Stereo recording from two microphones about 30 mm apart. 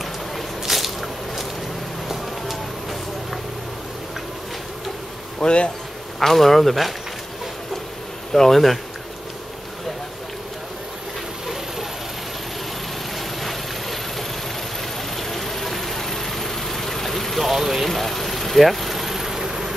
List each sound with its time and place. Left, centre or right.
0.7 s squish: centre
2.0 s vehicle: centre
5.4 s speech: centre
6.1 s a man's voice: centre
8.3 s speech: centre
13.4 s vehicle: centre
15.1 s vehicle: centre
17.4 s vehicle: centre